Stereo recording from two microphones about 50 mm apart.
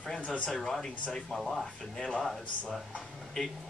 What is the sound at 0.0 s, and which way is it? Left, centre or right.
Speech, centre.